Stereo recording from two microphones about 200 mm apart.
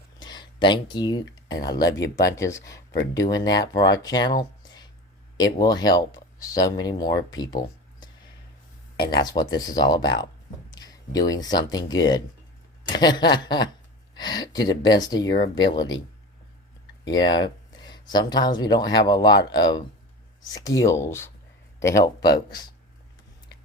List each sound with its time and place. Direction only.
0.2 s a sound: 20° left (ahead or behind)
1.5 s speech: 20° left (ahead or behind)
2.0 s speech: 60° left (ahead or behind)
2.3 s speech: 15° left (ahead or behind)
5.4 s speech: 20° left (ahead or behind)
9.2 s speech: 20° left (ahead or behind)
17.1 s a sound: 20° left (ahead or behind)
18.1 s speech: 20° left (ahead or behind)